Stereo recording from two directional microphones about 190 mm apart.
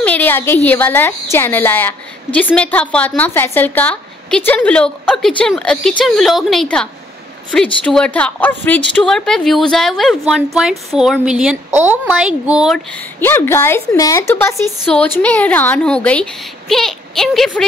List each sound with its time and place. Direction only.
0.0 s a woman's voice: 10° left (ahead or behind)
13.2 s a woman's voice: 10° left (ahead or behind)